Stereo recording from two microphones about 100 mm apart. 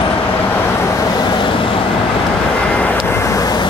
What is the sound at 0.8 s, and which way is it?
Vehicle, 30° left (ahead or behind).